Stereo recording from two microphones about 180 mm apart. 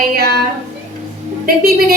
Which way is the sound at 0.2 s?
60° right (ahead or behind).